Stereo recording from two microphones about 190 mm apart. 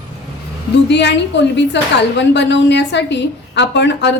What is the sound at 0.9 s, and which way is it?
A woman's voice, 65° left (ahead or behind).